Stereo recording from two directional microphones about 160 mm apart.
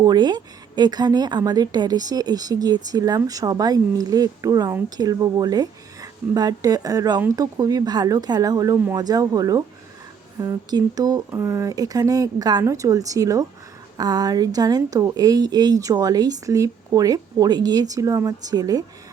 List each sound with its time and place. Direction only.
0.0 s a woman's voice: 25° right (ahead or behind)